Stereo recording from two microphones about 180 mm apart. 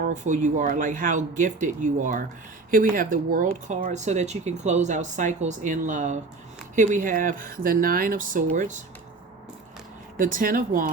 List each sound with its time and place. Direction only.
0.0 s speech: 45° right (ahead or behind)
10.2 s speech: 50° right (ahead or behind)